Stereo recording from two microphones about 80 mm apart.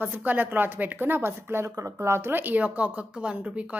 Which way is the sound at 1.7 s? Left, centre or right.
Right.